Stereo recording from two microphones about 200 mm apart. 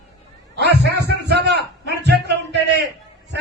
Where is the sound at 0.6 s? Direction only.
55° right (ahead or behind).